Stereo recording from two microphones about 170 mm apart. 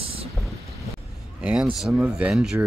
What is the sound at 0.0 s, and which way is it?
Vehicle, 35° right (ahead or behind).